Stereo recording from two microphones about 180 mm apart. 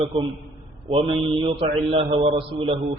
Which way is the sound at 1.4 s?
35° right (ahead or behind).